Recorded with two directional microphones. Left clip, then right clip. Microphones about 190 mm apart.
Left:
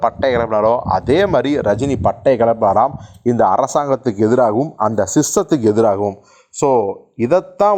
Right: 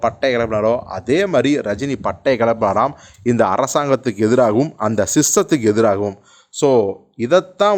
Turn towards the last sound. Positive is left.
turn(degrees=0)  # may be behind; listen again after turning